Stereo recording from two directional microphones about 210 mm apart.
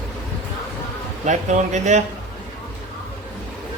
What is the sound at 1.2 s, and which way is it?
Speech, 35° right (ahead or behind).